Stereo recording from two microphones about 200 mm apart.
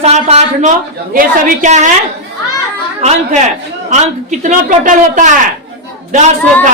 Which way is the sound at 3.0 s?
35° right (ahead or behind).